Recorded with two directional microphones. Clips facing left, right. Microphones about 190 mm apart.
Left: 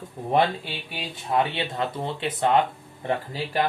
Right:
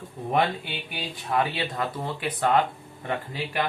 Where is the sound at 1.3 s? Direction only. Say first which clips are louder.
Left 2 dB; 25° left (ahead or behind).